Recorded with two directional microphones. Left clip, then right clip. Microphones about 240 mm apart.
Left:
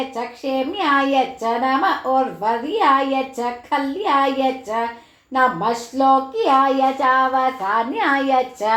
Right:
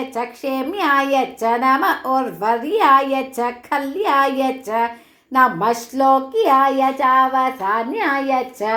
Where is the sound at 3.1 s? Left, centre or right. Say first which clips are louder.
Right 1 dB; right.